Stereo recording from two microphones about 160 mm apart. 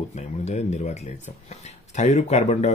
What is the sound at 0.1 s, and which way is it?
Speech, 45° left (ahead or behind).